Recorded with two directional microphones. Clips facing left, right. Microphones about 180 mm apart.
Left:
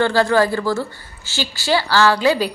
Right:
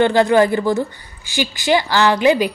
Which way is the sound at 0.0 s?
20° right (ahead or behind).